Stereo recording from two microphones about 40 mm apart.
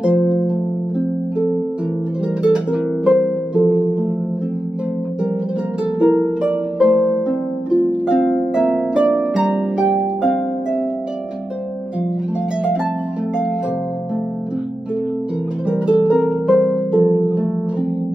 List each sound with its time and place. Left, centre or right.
0.0 s harp: right
2.4 s harp: right
6.2 s harp: right
15.7 s harp: right